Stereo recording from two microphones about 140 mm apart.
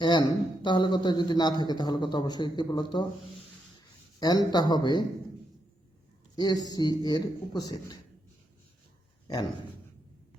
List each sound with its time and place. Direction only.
0.0 s a man's voice: 35° left (ahead or behind)
4.2 s a man's voice: 30° left (ahead or behind)
6.3 s speech: 30° left (ahead or behind)
9.2 s a man's voice: 30° left (ahead or behind)